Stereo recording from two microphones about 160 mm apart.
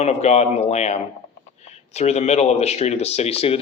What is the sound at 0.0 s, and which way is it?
Speech, 40° left (ahead or behind).